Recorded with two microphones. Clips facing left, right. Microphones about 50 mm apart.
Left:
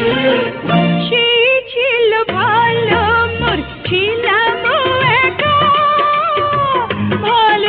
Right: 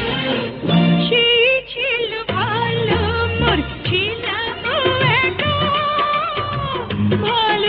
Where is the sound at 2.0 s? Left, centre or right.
Left.